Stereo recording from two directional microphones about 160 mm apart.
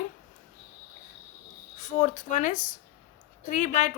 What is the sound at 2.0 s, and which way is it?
Speech, 50° left (ahead or behind).